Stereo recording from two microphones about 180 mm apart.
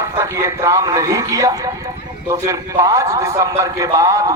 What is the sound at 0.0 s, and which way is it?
A man's voice, 15° right (ahead or behind).